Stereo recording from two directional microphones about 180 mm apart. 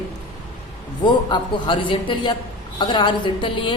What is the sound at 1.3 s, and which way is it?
A woman's voice, 25° left (ahead or behind).